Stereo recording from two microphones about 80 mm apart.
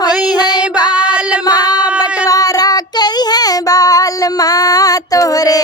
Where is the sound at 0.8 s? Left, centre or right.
Centre.